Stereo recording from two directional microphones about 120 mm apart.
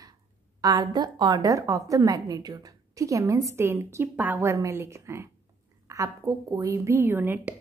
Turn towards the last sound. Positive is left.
turn(degrees=-15)  # may be behind; listen again after turning